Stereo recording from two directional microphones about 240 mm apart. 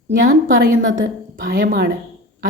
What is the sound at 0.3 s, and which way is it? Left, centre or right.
A woman's voice, right.